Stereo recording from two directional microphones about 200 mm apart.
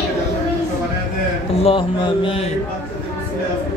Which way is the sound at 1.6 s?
25° left (ahead or behind).